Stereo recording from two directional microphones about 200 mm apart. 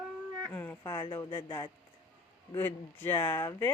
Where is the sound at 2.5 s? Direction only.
10° left (ahead or behind).